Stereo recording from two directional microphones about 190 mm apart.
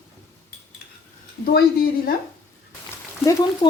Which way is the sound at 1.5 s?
55° left (ahead or behind).